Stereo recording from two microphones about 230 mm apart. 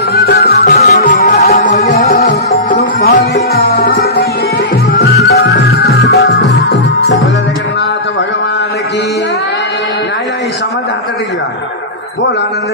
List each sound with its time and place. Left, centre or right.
0.1 s music: left
0.7 s music: left
5.5 s music: left